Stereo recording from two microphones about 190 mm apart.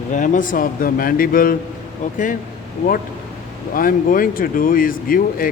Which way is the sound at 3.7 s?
45° left (ahead or behind).